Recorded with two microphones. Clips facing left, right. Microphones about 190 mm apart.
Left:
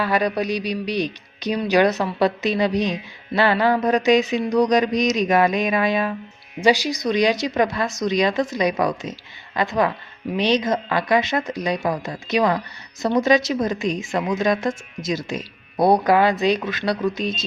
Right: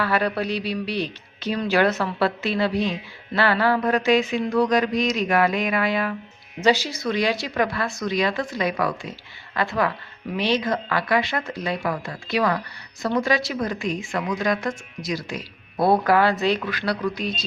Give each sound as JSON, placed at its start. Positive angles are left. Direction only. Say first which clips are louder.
{"t": 0.0, "sound": "speech", "louder": "left 2 dB", "side_deg": 15}